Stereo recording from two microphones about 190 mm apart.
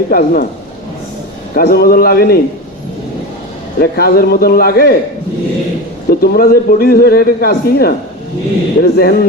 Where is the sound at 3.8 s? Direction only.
55° left (ahead or behind).